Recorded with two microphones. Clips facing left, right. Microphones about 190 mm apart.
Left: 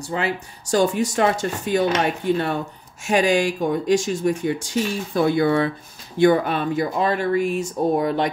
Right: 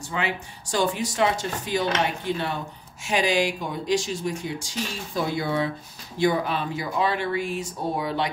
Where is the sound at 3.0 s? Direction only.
50° left (ahead or behind).